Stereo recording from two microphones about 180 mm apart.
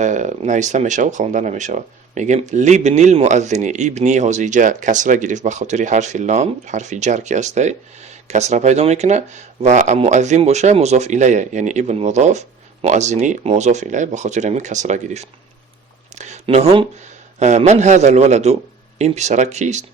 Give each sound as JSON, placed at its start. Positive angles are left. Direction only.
{"t": 0.0, "sound": "speech", "side_deg": -40}
{"t": 16.1, "sound": "a sound", "side_deg": -40}
{"t": 17.4, "sound": "speech", "side_deg": -40}